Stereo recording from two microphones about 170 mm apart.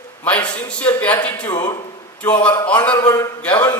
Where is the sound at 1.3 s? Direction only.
25° left (ahead or behind).